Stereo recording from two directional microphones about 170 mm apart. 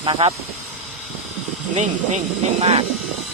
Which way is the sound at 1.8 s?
40° right (ahead or behind).